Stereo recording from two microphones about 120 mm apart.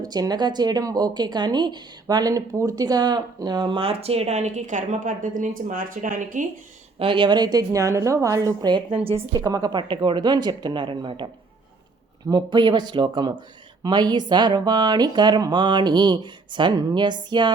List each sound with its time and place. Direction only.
0.0 s speech: 35° right (ahead or behind); by 6.5 s 90° right
7.0 s speech: 45° right (ahead or behind)
9.9 s speech: 40° right (ahead or behind)